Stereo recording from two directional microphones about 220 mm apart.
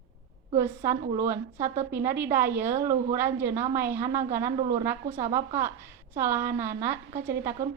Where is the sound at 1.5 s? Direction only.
30° right (ahead or behind).